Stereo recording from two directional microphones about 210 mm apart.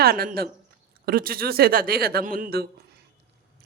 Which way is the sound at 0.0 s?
45° right (ahead or behind).